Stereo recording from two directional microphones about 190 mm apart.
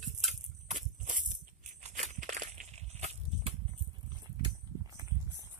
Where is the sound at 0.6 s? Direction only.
40° right (ahead or behind).